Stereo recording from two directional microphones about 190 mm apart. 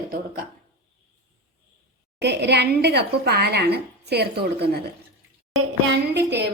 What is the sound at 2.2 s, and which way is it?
A woman's voice, 60° right (ahead or behind).